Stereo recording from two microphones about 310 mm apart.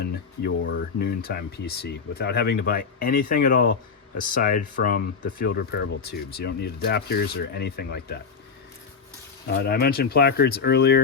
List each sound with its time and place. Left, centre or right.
0.0 s speech: left
9.5 s speech: left